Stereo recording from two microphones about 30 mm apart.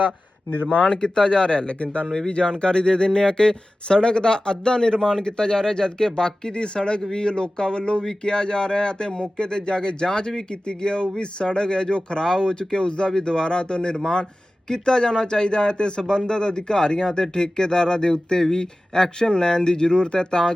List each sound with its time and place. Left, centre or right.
0.7 s speech: left
0.9 s speech: left
1.8 s speech: left
2.0 s speech: left